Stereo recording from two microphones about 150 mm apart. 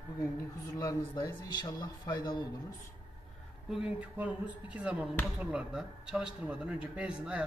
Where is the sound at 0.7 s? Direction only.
25° left (ahead or behind).